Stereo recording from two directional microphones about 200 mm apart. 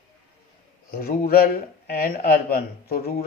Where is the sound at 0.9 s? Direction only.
45° left (ahead or behind).